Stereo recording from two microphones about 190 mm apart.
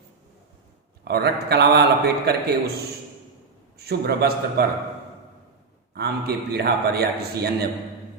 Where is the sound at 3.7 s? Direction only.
55° right (ahead or behind).